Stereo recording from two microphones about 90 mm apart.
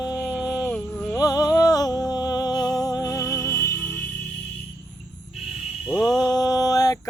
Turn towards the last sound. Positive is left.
turn(degrees=40)  # may be behind; listen again after turning